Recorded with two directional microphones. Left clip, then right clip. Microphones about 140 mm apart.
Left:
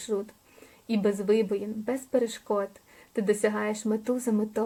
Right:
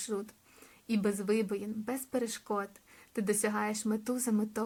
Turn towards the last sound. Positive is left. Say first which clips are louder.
# left 6 dB
turn(degrees=-20)  # may be behind; listen again after turning